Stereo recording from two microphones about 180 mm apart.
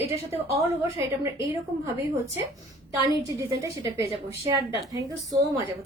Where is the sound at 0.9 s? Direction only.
15° right (ahead or behind).